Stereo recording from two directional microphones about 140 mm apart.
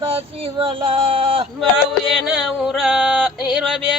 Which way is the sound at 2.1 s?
5° right (ahead or behind).